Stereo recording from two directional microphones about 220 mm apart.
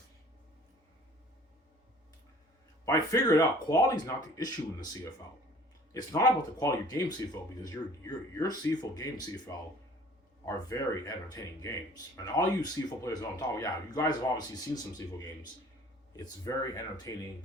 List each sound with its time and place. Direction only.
2.8 s speech: 15° left (ahead or behind)
5.9 s speech: 15° left (ahead or behind)
8.4 s speech: 15° left (ahead or behind)
16.1 s speech: 15° left (ahead or behind)